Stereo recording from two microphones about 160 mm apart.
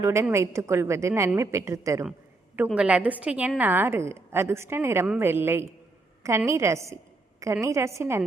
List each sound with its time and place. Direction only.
0.0 s a woman's voice: 15° right (ahead or behind)
2.7 s a woman's voice: 10° right (ahead or behind)